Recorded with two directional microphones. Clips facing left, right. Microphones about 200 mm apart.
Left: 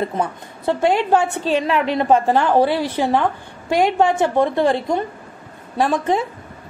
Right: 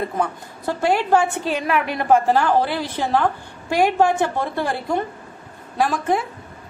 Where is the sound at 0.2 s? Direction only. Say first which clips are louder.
Left 1 dB; 20° left (ahead or behind).